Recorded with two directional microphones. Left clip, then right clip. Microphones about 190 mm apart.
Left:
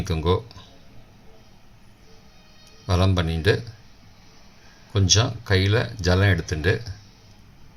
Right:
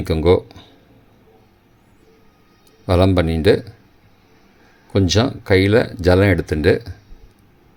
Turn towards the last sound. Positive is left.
turn(degrees=-40)  # may be behind; listen again after turning